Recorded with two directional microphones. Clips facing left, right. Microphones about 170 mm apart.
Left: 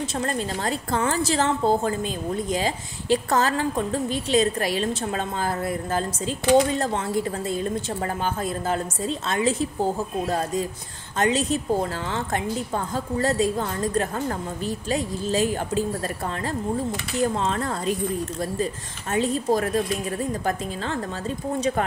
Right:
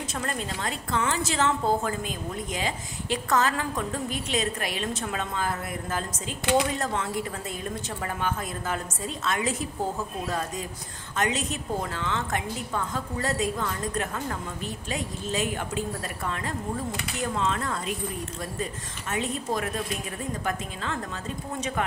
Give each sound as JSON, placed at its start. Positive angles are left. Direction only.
{"t": 0.1, "sound": "a woman's voice", "side_deg": 30}
{"t": 19.1, "sound": "a woman's voice", "side_deg": 35}